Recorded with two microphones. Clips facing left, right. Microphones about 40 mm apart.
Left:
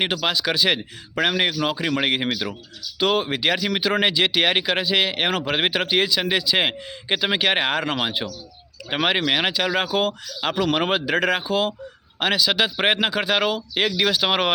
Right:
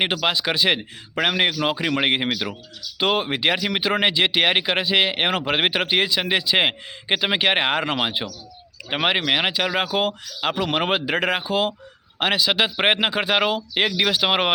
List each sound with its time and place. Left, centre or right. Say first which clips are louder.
0.0 s a man's voice: right 1 dB; centre